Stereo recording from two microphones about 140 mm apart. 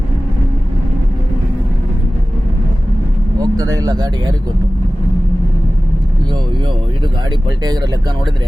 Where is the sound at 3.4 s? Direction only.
25° right (ahead or behind).